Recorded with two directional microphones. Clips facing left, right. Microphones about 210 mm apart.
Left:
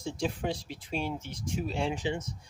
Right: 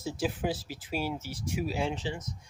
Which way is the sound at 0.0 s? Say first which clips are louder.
Right 1 dB; 5° right (ahead or behind).